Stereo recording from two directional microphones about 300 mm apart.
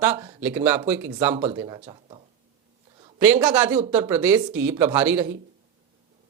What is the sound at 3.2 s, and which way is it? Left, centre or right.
Speech, centre.